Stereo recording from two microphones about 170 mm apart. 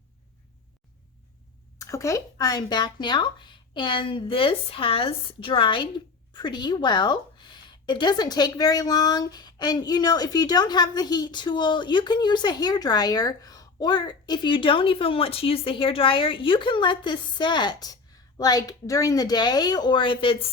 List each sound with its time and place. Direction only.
1.8 s a woman's voice: 20° left (ahead or behind)